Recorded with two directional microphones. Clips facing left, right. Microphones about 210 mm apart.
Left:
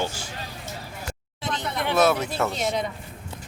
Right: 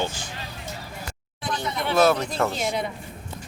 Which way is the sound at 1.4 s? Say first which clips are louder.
Even; 20° left (ahead or behind).